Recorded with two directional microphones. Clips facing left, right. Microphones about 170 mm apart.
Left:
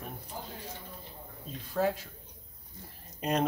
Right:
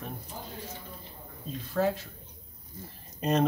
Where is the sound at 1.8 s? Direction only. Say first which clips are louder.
Right 2 dB; 10° left (ahead or behind).